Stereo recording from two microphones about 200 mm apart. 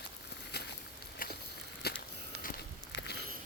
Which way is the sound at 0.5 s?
55° left (ahead or behind).